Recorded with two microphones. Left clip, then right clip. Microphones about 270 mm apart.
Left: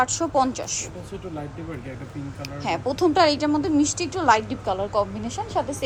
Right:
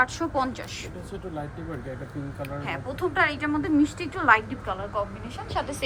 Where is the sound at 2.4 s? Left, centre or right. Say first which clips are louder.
Left 7 dB; centre.